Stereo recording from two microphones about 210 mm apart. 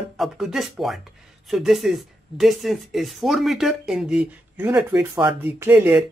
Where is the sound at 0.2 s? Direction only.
Centre (ahead or behind).